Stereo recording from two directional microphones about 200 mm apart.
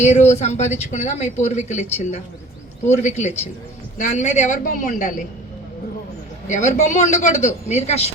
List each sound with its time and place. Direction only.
0.0 s a man's voice: 35° left (ahead or behind)
2.8 s a man's voice: 35° left (ahead or behind)
6.5 s a man's voice: 35° left (ahead or behind)